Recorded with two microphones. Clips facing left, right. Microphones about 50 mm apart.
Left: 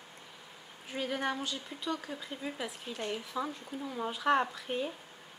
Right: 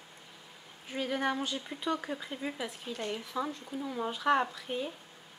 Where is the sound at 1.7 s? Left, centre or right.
Right.